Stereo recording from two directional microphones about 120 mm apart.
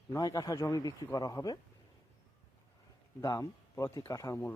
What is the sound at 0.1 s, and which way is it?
A man's voice, 30° left (ahead or behind).